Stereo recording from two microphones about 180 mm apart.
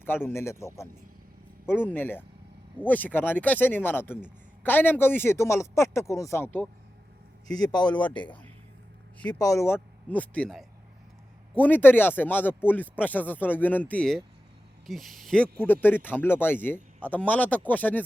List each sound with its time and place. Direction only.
0.0 s speech: 10° left (ahead or behind)
7.4 s a man's voice: 20° left (ahead or behind)
9.1 s speech: 5° left (ahead or behind)